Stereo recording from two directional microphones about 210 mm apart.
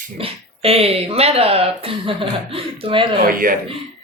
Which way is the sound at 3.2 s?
45° right (ahead or behind).